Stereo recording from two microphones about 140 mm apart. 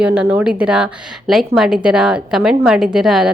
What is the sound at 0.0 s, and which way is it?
A woman's voice, 10° right (ahead or behind).